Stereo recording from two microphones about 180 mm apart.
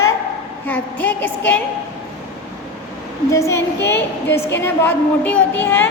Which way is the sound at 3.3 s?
15° left (ahead or behind).